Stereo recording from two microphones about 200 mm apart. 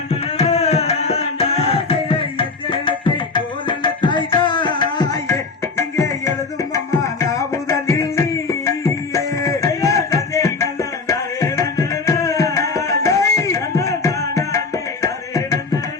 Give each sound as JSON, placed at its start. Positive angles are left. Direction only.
{"t": 0.1, "sound": "tabla", "side_deg": 30}
{"t": 6.7, "sound": "music", "side_deg": 15}
{"t": 15.0, "sound": "tabla", "side_deg": 15}